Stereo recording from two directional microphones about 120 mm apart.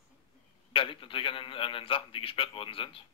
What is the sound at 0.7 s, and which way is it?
A man's voice, 50° left (ahead or behind).